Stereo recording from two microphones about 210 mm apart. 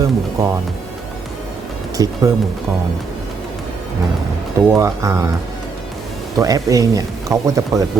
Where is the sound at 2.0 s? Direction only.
20° right (ahead or behind).